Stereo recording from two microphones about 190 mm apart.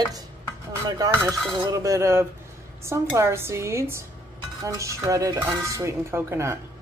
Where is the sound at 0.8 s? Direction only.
20° right (ahead or behind).